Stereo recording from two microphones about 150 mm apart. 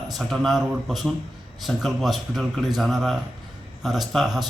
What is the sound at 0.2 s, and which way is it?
Speech, centre (ahead or behind).